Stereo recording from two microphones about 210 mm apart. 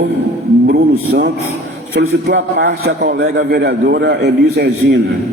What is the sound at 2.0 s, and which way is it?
A man's voice, 55° right (ahead or behind).